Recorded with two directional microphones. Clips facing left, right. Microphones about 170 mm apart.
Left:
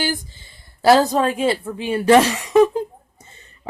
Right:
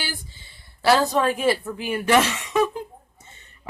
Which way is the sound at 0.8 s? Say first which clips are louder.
Left 5 dB; 40° left (ahead or behind).